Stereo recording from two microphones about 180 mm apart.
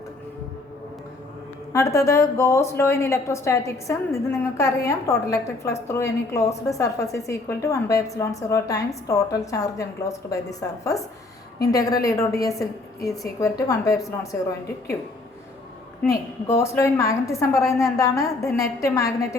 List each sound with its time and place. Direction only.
1.7 s a woman's voice: 15° left (ahead or behind)
16.0 s a woman's voice: 15° left (ahead or behind)